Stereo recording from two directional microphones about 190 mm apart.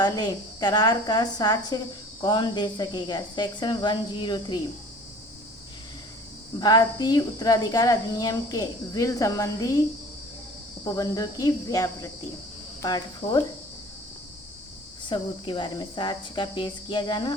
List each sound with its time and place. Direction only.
0.0 s speech: 20° left (ahead or behind)
6.6 s speech: 20° left (ahead or behind)
10.8 s speech: 20° left (ahead or behind)
15.1 s speech: 25° left (ahead or behind)